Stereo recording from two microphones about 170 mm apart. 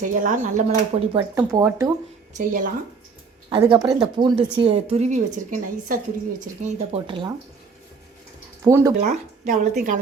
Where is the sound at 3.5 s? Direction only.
25° right (ahead or behind).